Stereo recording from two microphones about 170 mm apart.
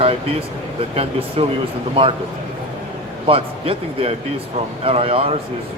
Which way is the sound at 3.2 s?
35° right (ahead or behind).